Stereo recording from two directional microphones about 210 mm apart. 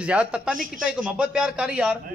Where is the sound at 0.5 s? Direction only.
40° right (ahead or behind).